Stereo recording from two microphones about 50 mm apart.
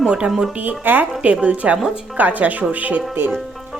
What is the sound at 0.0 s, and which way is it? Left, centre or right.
Speech, centre.